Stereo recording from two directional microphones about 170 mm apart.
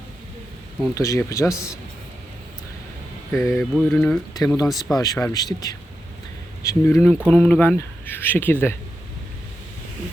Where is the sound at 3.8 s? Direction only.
10° left (ahead or behind).